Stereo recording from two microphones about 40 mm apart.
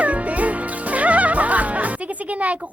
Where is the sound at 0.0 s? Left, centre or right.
Right.